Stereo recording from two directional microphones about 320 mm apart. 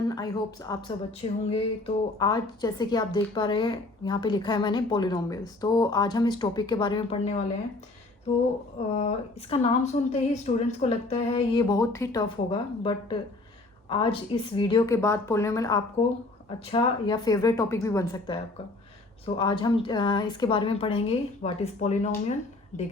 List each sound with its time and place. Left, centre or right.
0.1 s a woman's voice: centre
9.0 s a woman's voice: left